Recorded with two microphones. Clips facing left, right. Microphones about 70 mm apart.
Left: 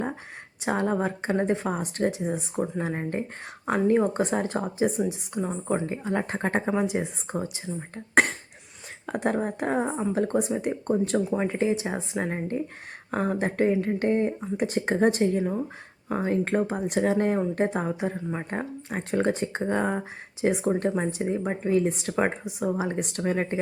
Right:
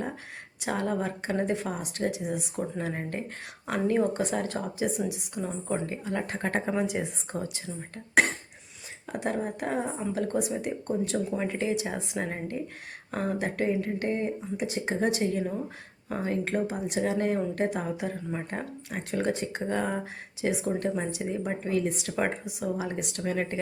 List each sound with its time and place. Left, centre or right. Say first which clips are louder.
0.6 s speech: left 4 dB; left
3.8 s speech: left 3 dB; left
6.7 s speech: left 3 dB; left
9.0 s speech: left 4 dB; left
11.3 s speech: left 4 dB; left